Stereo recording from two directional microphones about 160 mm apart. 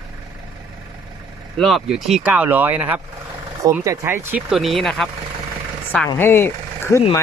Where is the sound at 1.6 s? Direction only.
Centre (ahead or behind).